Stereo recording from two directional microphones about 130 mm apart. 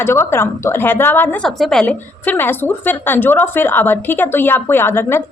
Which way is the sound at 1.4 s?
5° left (ahead or behind).